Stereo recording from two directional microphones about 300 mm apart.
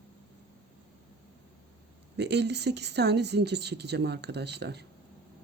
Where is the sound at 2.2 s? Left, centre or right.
Right.